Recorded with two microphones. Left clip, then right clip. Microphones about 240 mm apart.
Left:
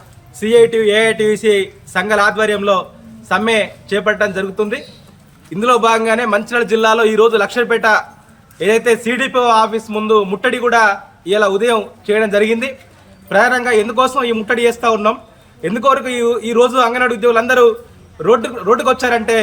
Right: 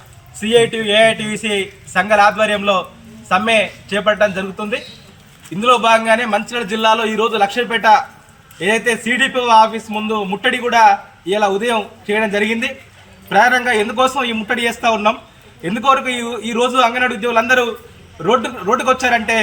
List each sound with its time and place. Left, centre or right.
0.3 s a man's voice: centre
9.9 s speech: left
10.4 s a man's voice: centre